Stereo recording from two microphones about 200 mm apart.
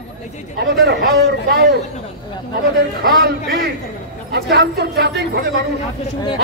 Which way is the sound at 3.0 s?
50° right (ahead or behind).